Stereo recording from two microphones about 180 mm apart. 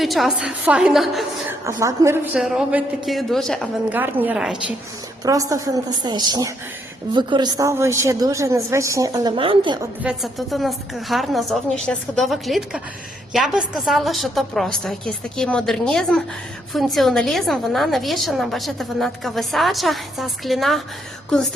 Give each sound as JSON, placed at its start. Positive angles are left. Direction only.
{"t": 0.0, "sound": "a woman's voice", "side_deg": 0}
{"t": 1.6, "sound": "a woman's voice", "side_deg": -15}
{"t": 2.3, "sound": "a woman's voice", "side_deg": -5}
{"t": 3.8, "sound": "a woman's voice", "side_deg": -10}
{"t": 5.2, "sound": "a woman's voice", "side_deg": -20}
{"t": 10.0, "sound": "a woman's voice", "side_deg": 0}